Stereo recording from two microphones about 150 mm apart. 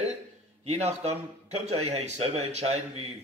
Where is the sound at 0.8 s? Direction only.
45° right (ahead or behind).